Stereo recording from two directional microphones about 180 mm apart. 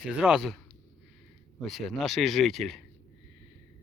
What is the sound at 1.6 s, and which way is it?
Speech, centre (ahead or behind).